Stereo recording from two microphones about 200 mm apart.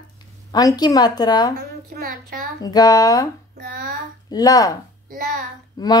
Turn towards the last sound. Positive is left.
turn(degrees=20)  # may be behind; listen again after turning